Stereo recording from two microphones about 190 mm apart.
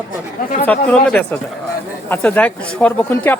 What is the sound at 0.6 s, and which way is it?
Speech, 5° left (ahead or behind).